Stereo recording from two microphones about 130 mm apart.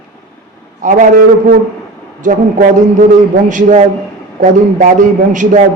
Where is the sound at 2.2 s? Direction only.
80° right.